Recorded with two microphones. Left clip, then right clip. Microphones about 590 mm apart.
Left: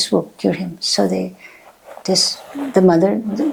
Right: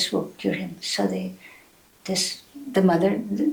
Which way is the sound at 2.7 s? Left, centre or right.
Left.